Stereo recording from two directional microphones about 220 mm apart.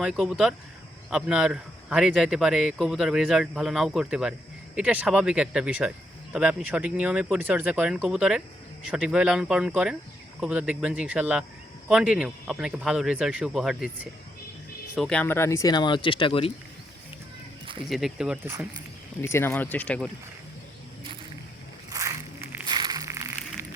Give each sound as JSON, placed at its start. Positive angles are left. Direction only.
{"t": 0.0, "sound": "a man's voice", "side_deg": -5}
{"t": 17.8, "sound": "a man's voice", "side_deg": 0}
{"t": 19.2, "sound": "speech", "side_deg": 10}
{"t": 21.8, "sound": "a sound", "side_deg": -15}